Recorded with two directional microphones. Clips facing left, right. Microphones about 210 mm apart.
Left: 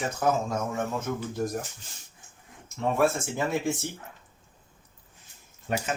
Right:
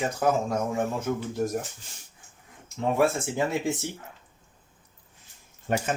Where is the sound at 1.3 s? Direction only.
10° right (ahead or behind).